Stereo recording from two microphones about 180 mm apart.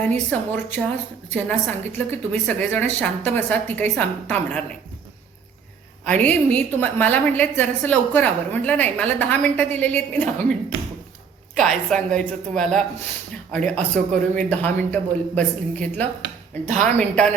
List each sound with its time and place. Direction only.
0.1 s a woman's voice: 10° left (ahead or behind)
6.1 s a woman's voice: 10° left (ahead or behind)
11.5 s a woman's voice: 5° left (ahead or behind)
16.6 s a woman's voice: 45° right (ahead or behind)